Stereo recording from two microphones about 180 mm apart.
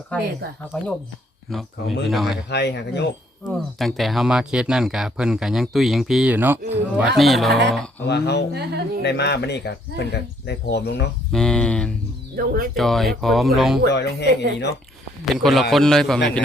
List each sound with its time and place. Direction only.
0.1 s speech: 10° left (ahead or behind)
2.5 s speech: 70° left (ahead or behind)
3.4 s speech: centre (ahead or behind)
8.0 s speech: 70° left (ahead or behind)
11.3 s speech: 5° left (ahead or behind)
12.4 s speech: 50° right (ahead or behind)
12.7 s speech: centre (ahead or behind)
13.9 s speech: 70° left (ahead or behind)
15.2 s speech: centre (ahead or behind)